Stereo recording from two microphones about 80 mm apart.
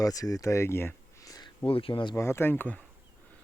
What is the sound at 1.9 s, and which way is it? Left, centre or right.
Speech, left.